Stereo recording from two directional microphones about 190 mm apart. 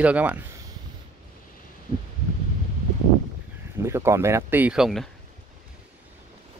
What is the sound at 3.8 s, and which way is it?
Speech, 15° right (ahead or behind).